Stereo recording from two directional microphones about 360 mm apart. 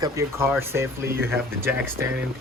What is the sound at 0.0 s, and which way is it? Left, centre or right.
Speech, centre.